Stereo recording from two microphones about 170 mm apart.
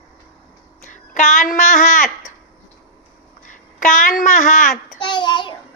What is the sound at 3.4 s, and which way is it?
A child's voice, 50° left (ahead or behind).